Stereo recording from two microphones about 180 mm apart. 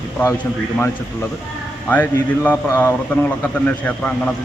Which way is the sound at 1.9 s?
10° left (ahead or behind).